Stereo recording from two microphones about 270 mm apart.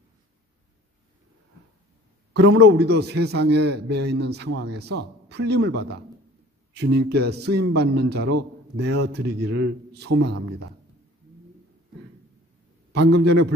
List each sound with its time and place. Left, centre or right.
2.3 s a man's voice: right
12.9 s a man's voice: right